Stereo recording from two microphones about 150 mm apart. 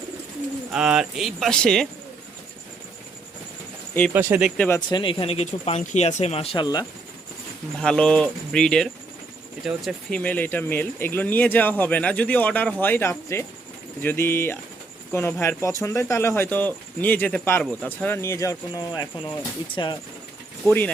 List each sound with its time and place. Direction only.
0.7 s speech: 5° right (ahead or behind)
4.1 s speech: 15° right (ahead or behind)
4.5 s speech: 10° left (ahead or behind)
4.9 s speech: 30° left (ahead or behind)
7.8 s speech: 5° left (ahead or behind); by 20.0 s 30° left (ahead or behind)
20.7 s speech: 10° left (ahead or behind)